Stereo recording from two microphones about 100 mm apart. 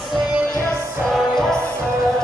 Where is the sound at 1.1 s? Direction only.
5° left (ahead or behind).